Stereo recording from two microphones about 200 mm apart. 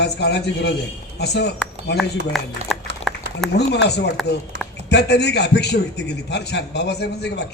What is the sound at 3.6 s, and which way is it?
Speech, 60° left (ahead or behind).